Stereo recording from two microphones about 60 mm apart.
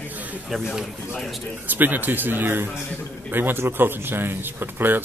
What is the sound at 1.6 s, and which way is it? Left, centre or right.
Speech, right.